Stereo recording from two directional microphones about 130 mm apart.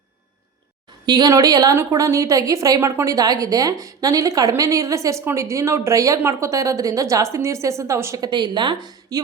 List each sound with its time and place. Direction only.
1.0 s a woman's voice: 30° right (ahead or behind)